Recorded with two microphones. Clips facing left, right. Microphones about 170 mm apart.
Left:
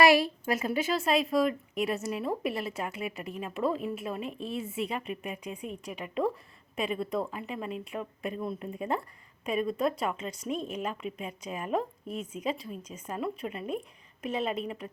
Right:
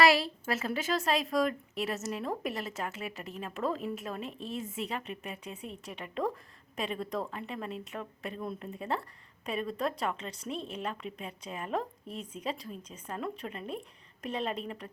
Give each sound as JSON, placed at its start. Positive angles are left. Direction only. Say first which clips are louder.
{"t": 0.0, "sound": "a woman's voice", "louder": "left 3 dB", "side_deg": 20}
{"t": 12.0, "sound": "speech", "louder": "left 5 dB", "side_deg": -35}
{"t": 12.3, "sound": "speech", "louder": "left 3 dB", "side_deg": 10}